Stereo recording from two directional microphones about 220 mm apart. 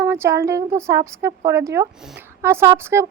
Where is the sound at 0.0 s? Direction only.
10° right (ahead or behind).